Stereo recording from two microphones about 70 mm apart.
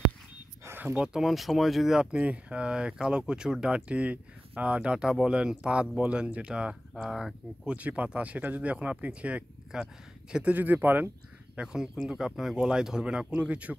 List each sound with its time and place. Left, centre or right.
0.7 s a sound: right
0.9 s speech: centre
1.2 s speech: centre
2.0 s speech: centre
7.7 s speech: centre
10.3 s speech: right
11.5 s speech: centre